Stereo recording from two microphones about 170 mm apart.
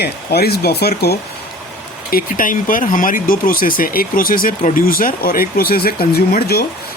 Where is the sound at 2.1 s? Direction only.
55° left (ahead or behind).